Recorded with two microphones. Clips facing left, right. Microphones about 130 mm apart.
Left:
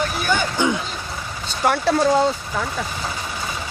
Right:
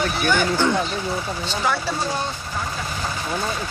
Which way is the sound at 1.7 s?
60° left (ahead or behind).